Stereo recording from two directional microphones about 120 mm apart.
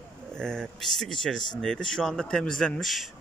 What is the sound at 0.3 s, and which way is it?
Speech, 5° left (ahead or behind).